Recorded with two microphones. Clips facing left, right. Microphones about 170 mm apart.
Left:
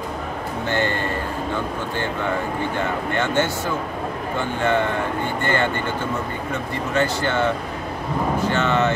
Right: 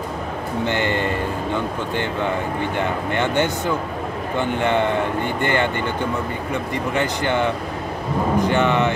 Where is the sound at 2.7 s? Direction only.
15° right (ahead or behind).